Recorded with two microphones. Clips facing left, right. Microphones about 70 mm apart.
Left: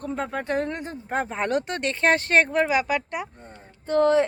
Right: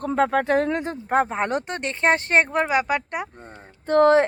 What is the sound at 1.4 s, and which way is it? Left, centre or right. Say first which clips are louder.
Speech: even; right.